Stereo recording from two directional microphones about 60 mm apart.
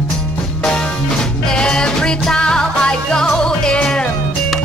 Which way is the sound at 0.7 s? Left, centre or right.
Centre.